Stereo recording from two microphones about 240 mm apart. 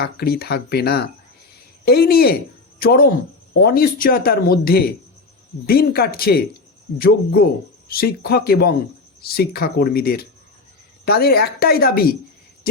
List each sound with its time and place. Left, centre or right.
0.0 s speech: left